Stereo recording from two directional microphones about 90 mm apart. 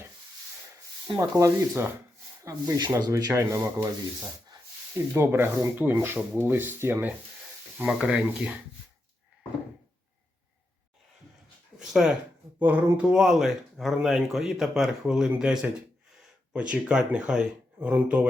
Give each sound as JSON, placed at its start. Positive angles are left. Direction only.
{"t": 1.2, "sound": "speech", "side_deg": -35}
{"t": 2.7, "sound": "speech", "side_deg": -45}
{"t": 3.2, "sound": "speech", "side_deg": -35}
{"t": 5.1, "sound": "speech", "side_deg": -25}
{"t": 7.9, "sound": "speech", "side_deg": -10}
{"t": 11.8, "sound": "speech", "side_deg": -5}
{"t": 12.5, "sound": "speech", "side_deg": -20}
{"t": 13.0, "sound": "speech", "side_deg": -10}